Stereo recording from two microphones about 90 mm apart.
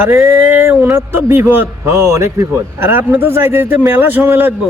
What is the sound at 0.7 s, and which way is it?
A man's voice, 25° right (ahead or behind).